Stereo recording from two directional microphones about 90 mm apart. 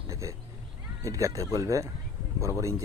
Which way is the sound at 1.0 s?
35° right (ahead or behind).